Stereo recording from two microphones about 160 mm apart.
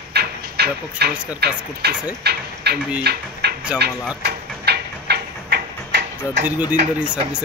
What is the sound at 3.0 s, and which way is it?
Speech, 90° right.